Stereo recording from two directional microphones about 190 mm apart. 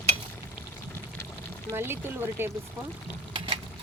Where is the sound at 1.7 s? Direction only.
10° right (ahead or behind).